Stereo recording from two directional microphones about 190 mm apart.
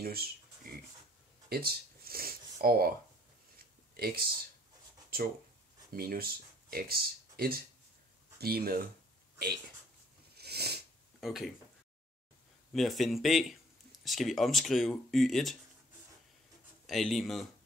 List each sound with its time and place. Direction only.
0.0 s speech: 50° right (ahead or behind)
1.5 s speech: 55° right (ahead or behind)
3.5 s a sound: 55° right (ahead or behind)
5.9 s speech: 50° right (ahead or behind)
10.3 s a sound: 55° right (ahead or behind)
11.1 s speech: centre (ahead or behind)
12.7 s speech: centre (ahead or behind)
16.8 s speech: centre (ahead or behind)